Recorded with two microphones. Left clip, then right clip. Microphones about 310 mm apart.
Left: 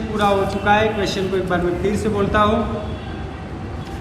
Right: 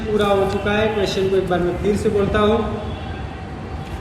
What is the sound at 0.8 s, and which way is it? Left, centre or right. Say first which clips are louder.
A man's voice: even; centre.